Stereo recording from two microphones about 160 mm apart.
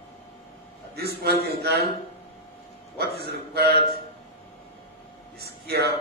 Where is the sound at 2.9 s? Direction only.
90° right.